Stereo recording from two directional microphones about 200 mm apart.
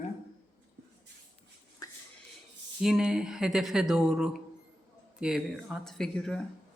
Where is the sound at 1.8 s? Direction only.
20° left (ahead or behind).